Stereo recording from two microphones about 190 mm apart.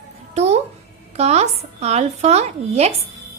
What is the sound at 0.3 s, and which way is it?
Music, 35° right (ahead or behind).